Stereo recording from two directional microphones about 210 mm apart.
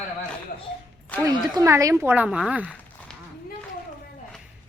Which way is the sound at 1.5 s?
15° right (ahead or behind).